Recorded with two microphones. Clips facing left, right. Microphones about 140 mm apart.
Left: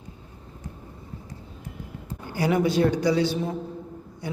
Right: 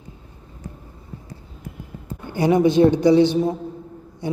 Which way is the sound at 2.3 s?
25° right (ahead or behind).